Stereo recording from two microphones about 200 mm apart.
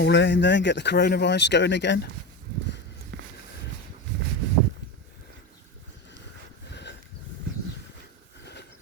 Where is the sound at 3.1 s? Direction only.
65° right (ahead or behind).